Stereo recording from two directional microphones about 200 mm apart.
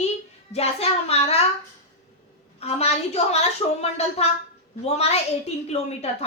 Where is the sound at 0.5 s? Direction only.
30° left (ahead or behind).